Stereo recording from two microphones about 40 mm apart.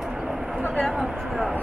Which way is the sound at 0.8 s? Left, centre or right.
Centre.